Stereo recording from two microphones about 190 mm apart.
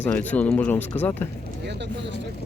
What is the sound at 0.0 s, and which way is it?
Speech, 10° left (ahead or behind).